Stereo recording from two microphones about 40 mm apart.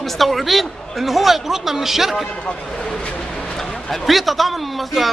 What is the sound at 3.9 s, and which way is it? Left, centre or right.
A man's voice, centre.